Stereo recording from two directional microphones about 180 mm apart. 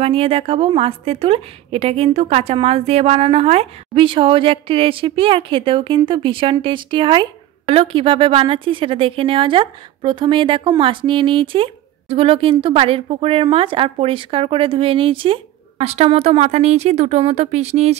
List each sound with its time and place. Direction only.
0.0 s a woman's voice: 35° right (ahead or behind)